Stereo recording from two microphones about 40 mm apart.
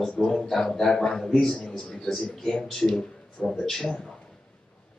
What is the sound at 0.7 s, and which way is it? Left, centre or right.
Speech, centre.